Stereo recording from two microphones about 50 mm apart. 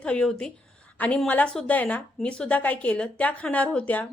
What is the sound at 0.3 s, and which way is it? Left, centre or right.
Speech, centre.